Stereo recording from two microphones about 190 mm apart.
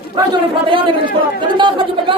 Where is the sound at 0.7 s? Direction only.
25° right (ahead or behind).